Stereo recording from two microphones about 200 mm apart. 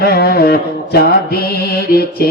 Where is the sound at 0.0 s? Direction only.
50° left (ahead or behind).